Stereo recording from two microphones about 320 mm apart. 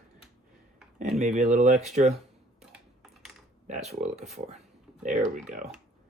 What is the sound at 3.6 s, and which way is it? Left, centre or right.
Speech, right.